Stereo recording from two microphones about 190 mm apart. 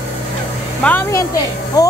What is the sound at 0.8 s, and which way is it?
Speech, 10° left (ahead or behind).